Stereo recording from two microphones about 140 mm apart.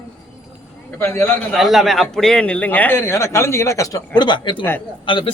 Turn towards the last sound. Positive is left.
turn(degrees=35)  # may be behind; listen again after turning